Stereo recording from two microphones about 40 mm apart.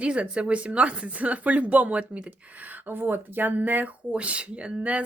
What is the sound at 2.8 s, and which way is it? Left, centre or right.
Speech, right.